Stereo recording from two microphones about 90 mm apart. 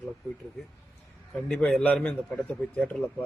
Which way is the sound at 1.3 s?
10° left (ahead or behind).